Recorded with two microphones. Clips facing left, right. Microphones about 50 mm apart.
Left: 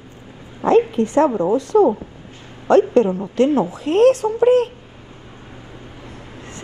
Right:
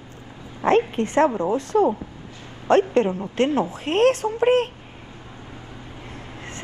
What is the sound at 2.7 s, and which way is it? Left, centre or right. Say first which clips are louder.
Speech: left 4 dB; right.